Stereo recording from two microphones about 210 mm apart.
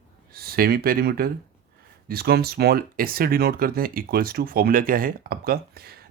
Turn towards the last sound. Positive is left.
turn(degrees=-45)  # may be behind; listen again after turning